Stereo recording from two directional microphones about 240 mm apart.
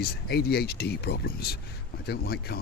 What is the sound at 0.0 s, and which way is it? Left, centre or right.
Speech, left.